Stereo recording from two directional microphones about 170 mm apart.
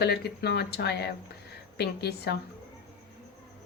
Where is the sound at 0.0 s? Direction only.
70° left (ahead or behind).